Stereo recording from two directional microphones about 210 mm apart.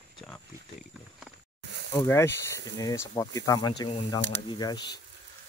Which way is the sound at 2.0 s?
10° left (ahead or behind).